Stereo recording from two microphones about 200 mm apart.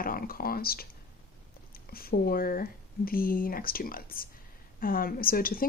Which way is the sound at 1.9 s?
50° left (ahead or behind).